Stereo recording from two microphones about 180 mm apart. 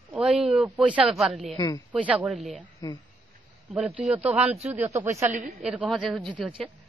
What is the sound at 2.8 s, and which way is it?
Speech, 20° left (ahead or behind).